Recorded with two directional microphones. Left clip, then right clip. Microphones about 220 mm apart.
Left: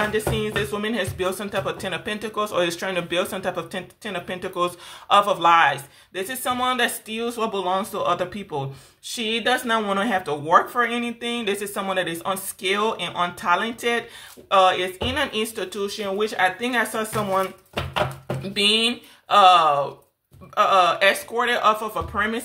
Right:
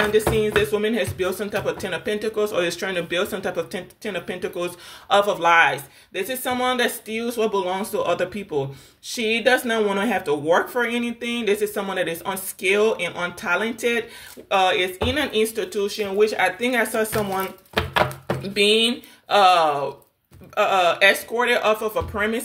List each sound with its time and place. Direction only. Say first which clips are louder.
0.4 s speech: right 5 dB; 15° left (ahead or behind)
9.1 s speech: right 3 dB; 15° left (ahead or behind)
17.7 s music: right 4 dB; 30° right (ahead or behind)
18.5 s speech: right 1 dB; 15° left (ahead or behind)